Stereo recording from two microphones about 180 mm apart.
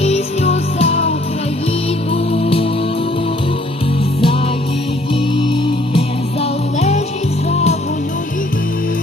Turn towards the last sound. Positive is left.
turn(degrees=35)  # may be behind; listen again after turning